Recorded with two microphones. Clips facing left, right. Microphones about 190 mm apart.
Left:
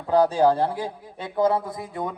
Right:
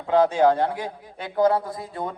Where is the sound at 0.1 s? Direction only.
35° left (ahead or behind).